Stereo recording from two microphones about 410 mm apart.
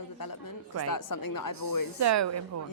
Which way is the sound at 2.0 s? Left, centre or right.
Right.